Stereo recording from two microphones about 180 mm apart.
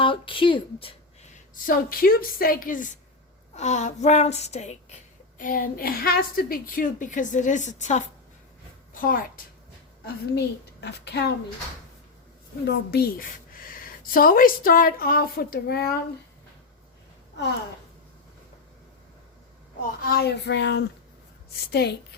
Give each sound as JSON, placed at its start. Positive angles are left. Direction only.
{"t": 0.0, "sound": "a woman's voice", "side_deg": 30}
{"t": 1.6, "sound": "a woman's voice", "side_deg": 55}
{"t": 5.4, "sound": "a woman's voice", "side_deg": 50}
{"t": 10.3, "sound": "speech", "side_deg": 70}
{"t": 12.6, "sound": "a woman's voice", "side_deg": 60}
{"t": 20.1, "sound": "a woman's voice", "side_deg": 60}